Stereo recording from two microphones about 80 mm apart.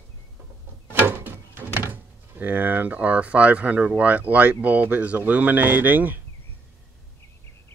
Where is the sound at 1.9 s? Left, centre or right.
Right.